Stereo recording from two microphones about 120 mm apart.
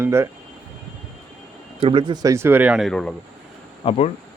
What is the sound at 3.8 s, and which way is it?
Speech, 60° left (ahead or behind).